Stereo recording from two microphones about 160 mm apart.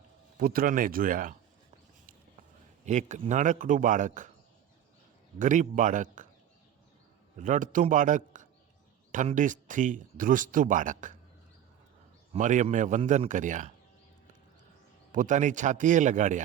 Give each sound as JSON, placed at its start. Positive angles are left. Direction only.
{"t": 0.3, "sound": "speech", "side_deg": -65}
{"t": 2.8, "sound": "speech", "side_deg": -50}
{"t": 5.4, "sound": "speech", "side_deg": -50}
{"t": 7.3, "sound": "speech", "side_deg": -50}
{"t": 12.3, "sound": "speech", "side_deg": -50}
{"t": 15.1, "sound": "speech", "side_deg": -55}